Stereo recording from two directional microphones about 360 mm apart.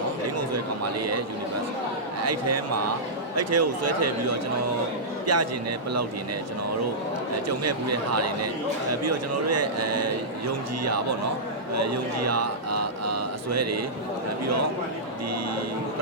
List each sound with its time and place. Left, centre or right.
2.2 s a man's voice: right
7.4 s a man's voice: right
11.7 s a sound: right